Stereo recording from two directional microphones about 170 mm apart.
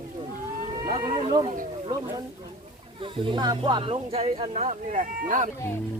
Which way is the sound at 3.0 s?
30° right (ahead or behind).